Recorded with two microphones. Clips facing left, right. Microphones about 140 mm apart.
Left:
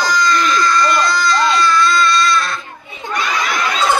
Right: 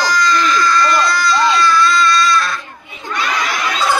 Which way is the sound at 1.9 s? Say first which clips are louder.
Right 1 dB; 25° left (ahead or behind).